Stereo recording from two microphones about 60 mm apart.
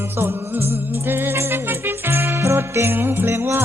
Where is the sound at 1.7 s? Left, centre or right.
Right.